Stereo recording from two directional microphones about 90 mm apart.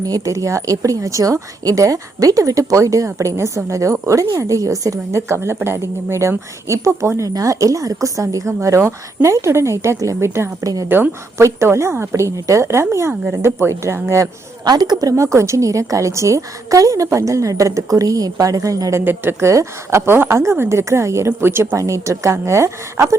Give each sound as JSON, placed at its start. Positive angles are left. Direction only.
{"t": 0.0, "sound": "a woman's voice", "side_deg": -40}
{"t": 14.6, "sound": "a woman's voice", "side_deg": -50}
{"t": 15.1, "sound": "a woman's voice", "side_deg": -30}